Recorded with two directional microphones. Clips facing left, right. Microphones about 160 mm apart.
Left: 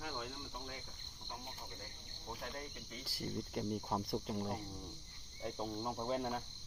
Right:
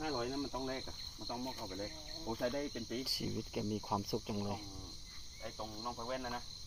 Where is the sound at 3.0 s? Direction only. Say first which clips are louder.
Right 1 dB; 15° right (ahead or behind).